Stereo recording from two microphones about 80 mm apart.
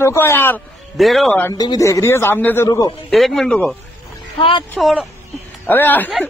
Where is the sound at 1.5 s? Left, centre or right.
Left.